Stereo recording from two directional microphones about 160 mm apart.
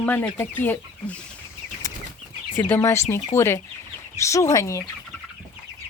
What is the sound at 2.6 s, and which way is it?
Speech, 15° left (ahead or behind).